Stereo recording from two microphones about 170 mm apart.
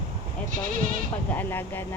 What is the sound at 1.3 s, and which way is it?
Speech, 15° left (ahead or behind).